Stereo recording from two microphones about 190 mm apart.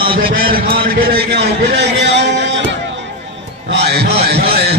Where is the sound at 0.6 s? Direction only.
50° right (ahead or behind); by 2.7 s 70° right (ahead or behind).